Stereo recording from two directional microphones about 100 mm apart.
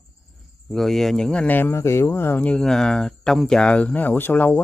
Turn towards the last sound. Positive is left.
turn(degrees=15)  # may be behind; listen again after turning